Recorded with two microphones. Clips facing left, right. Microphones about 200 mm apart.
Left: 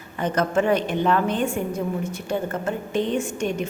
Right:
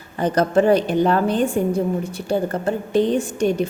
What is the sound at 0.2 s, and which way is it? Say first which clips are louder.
A woman's voice: right 5 dB; 35° right (ahead or behind).